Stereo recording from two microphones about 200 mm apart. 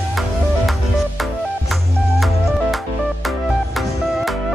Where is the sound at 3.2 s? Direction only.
Centre (ahead or behind).